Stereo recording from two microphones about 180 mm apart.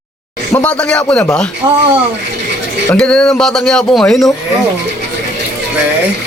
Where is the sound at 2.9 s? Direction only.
5° left (ahead or behind).